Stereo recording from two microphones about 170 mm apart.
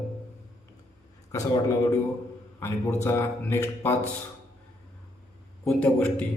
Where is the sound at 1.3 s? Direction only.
20° left (ahead or behind).